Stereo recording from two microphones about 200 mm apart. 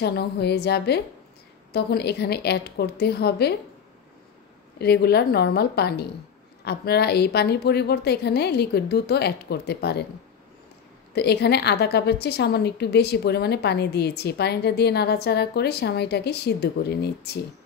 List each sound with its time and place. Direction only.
0.0 s a woman's voice: 55° left (ahead or behind)
4.7 s a woman's voice: 55° left (ahead or behind)
11.1 s a woman's voice: 55° left (ahead or behind)